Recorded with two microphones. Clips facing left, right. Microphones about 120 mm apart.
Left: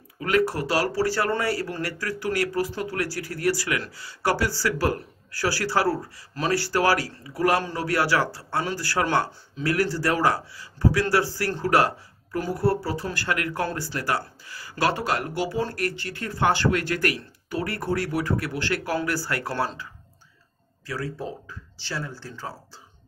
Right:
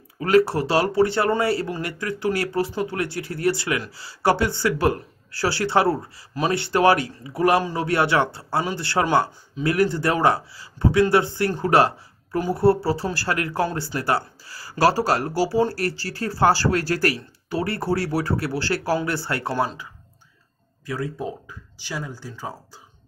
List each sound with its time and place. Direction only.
0.2 s speech: 30° right (ahead or behind)
20.8 s speech: 20° right (ahead or behind)